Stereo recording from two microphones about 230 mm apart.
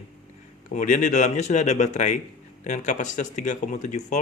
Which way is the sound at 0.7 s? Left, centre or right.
Left.